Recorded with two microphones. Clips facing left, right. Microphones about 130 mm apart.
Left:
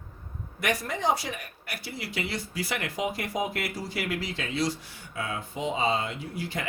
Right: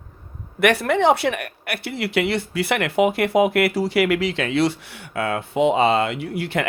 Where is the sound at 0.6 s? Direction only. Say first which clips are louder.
Right 11 dB; 70° right (ahead or behind).